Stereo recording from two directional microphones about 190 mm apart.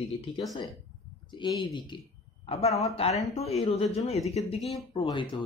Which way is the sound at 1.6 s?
25° left (ahead or behind).